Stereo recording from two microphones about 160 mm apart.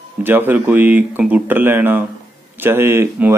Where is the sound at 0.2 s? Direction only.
10° right (ahead or behind).